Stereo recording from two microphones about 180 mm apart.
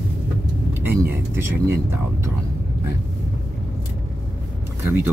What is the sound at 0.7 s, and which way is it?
Vehicle, 10° right (ahead or behind).